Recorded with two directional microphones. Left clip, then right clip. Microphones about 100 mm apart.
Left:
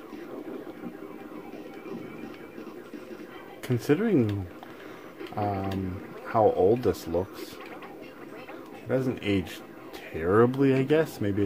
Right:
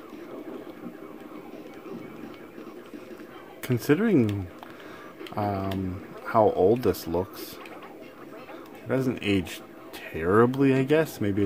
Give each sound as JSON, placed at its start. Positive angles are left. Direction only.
{"t": 3.6, "sound": "speech", "side_deg": -55}
{"t": 8.8, "sound": "speech", "side_deg": -60}
{"t": 10.1, "sound": "speech", "side_deg": -50}